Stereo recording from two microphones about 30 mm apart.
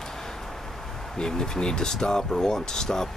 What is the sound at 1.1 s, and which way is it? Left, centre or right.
Speech, left.